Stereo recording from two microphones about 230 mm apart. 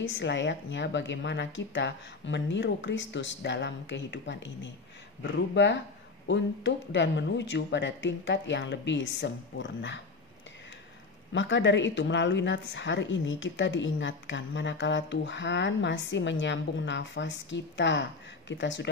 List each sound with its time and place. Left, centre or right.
0.1 s a woman's voice: left
11.3 s a woman's voice: left